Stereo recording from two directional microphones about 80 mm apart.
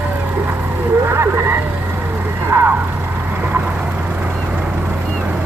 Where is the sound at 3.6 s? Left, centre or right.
Centre.